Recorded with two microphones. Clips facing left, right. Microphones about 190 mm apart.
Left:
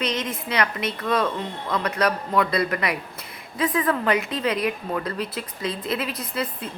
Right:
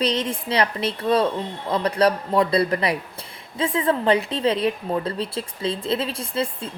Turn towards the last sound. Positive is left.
turn(degrees=-30)  # may be behind; listen again after turning